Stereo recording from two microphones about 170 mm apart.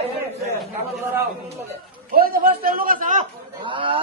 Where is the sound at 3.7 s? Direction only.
30° right (ahead or behind).